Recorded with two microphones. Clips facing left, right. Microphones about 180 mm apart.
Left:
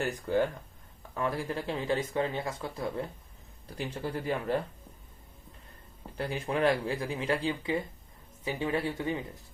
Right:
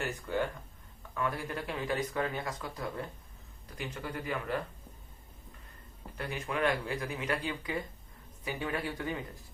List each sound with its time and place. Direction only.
0.0 s speech: 35° left (ahead or behind)
6.1 s speech: 30° left (ahead or behind)